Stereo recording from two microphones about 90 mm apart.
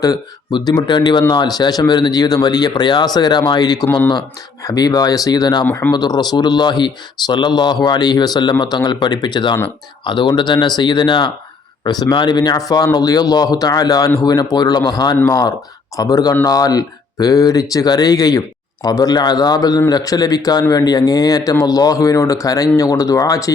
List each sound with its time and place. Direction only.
0.5 s a man's voice: 50° left (ahead or behind)